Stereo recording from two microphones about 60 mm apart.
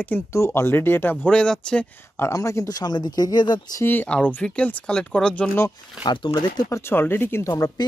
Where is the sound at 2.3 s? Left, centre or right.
Left.